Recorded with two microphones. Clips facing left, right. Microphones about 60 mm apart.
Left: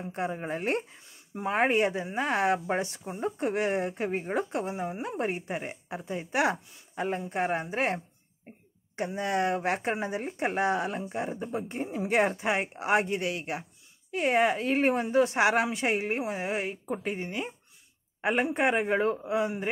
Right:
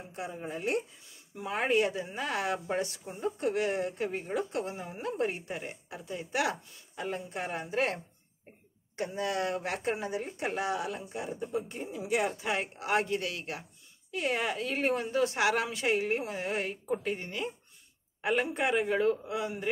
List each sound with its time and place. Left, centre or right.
0.1 s speech: left